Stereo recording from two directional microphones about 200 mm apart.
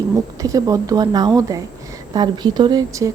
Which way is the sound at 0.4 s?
15° right (ahead or behind).